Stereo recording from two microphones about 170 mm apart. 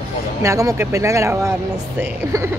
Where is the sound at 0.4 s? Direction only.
20° right (ahead or behind).